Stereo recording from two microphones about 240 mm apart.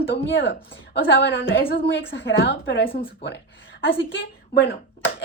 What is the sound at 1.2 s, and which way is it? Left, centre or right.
A woman's voice, left.